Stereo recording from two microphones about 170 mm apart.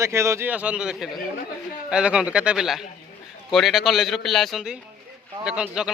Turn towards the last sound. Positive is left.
turn(degrees=-5)  # may be behind; listen again after turning